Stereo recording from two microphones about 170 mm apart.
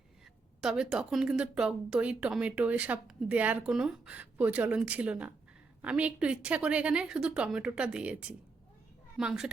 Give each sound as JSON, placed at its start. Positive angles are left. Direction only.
{"t": 0.6, "sound": "a woman's voice", "side_deg": -5}